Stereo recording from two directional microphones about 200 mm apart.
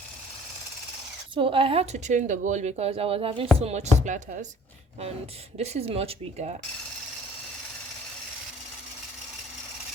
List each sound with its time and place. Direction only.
1.4 s speech: 25° right (ahead or behind)
5.5 s speech: 30° right (ahead or behind)